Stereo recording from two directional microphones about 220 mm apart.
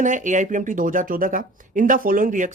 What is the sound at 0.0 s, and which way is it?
Speech, 35° right (ahead or behind).